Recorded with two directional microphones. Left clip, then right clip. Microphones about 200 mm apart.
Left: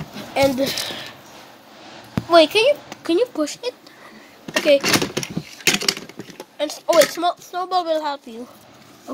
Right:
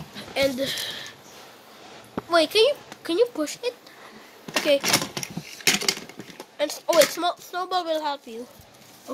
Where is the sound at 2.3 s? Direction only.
15° right (ahead or behind).